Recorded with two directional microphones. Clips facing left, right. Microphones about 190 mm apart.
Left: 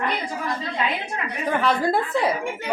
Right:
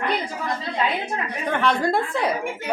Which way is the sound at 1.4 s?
5° left (ahead or behind).